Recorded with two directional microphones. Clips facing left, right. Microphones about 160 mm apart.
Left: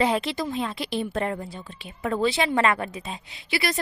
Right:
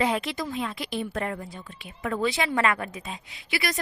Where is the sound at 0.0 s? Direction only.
30° left (ahead or behind).